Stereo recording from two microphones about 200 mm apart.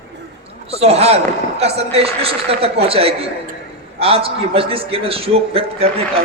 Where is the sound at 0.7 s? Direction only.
30° right (ahead or behind).